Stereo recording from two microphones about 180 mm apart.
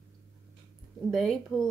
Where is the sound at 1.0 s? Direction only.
Centre (ahead or behind).